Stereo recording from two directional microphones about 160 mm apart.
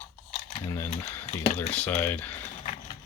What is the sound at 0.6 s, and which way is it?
Speech, 15° left (ahead or behind).